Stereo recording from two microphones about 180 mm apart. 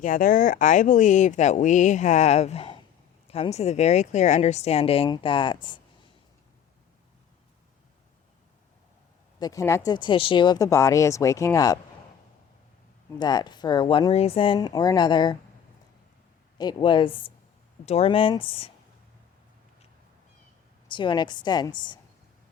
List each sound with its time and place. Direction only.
0.0 s speech: 50° left (ahead or behind); by 5.8 s 25° left (ahead or behind)
9.4 s speech: 20° left (ahead or behind)
13.1 s speech: 25° left (ahead or behind)
16.6 s speech: 25° left (ahead or behind)
20.8 s speech: 25° left (ahead or behind)